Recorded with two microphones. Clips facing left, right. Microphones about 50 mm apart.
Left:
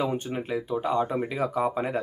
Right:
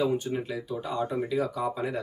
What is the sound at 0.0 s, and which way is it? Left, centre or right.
Speech, left.